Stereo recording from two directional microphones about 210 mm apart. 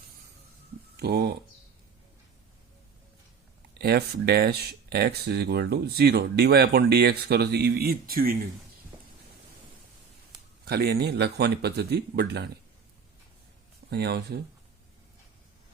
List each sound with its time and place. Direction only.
0.9 s speech: 50° right (ahead or behind)
3.8 s speech: 50° right (ahead or behind)
10.7 s speech: 50° right (ahead or behind)
13.9 s speech: 50° right (ahead or behind)